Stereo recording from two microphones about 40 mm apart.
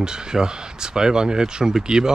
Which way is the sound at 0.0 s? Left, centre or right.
Centre.